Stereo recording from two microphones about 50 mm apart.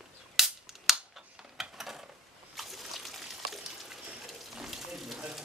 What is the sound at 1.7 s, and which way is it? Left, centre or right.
Mechanisms, centre.